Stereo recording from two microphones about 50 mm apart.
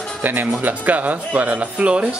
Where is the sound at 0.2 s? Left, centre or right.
Right.